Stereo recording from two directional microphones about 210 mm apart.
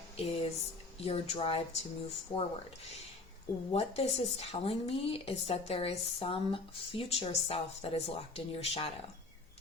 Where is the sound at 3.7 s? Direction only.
30° left (ahead or behind).